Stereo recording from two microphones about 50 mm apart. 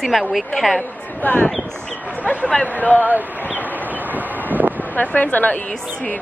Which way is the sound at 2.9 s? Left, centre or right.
Right.